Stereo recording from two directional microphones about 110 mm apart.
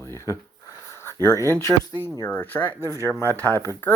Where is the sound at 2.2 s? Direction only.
15° left (ahead or behind).